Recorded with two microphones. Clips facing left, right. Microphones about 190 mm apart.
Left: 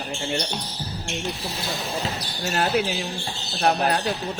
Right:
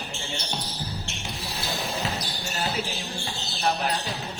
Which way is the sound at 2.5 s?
65° left (ahead or behind).